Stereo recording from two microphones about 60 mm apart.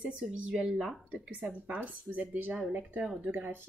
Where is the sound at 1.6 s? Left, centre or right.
Right.